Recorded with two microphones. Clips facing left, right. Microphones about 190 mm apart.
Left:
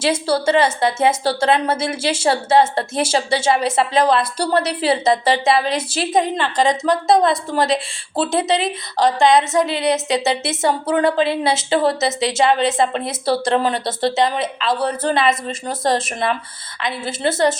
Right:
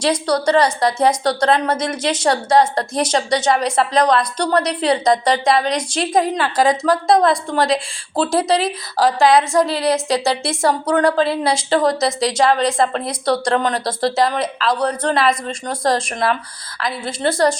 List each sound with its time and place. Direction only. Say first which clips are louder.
0.0 s a woman's voice: right 1 dB; 5° left (ahead or behind)
0.9 s a woman's voice: right 1 dB; 25° left (ahead or behind)
1.2 s a woman's voice: right 1 dB; 5° left (ahead or behind)
2.3 s a woman's voice: even; 25° left (ahead or behind)
2.9 s a woman's voice: right 1 dB; 5° left (ahead or behind)